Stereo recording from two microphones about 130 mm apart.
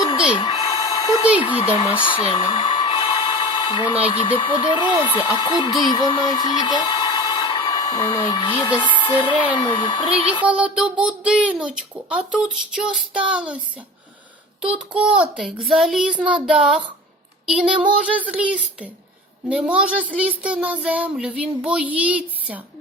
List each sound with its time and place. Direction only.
0.3 s a sound: 40° left (ahead or behind)
0.7 s a sound: 30° left (ahead or behind)
1.2 s speech: 10° right (ahead or behind)
2.0 s speech: 40° left (ahead or behind)
2.3 s a sound: 40° left (ahead or behind)
4.4 s speech: 35° left (ahead or behind)
10.4 s speech: 10° right (ahead or behind)
14.6 s speech: 5° right (ahead or behind)
15.6 s child singing: centre (ahead or behind)
17.4 s speech: 5° right (ahead or behind)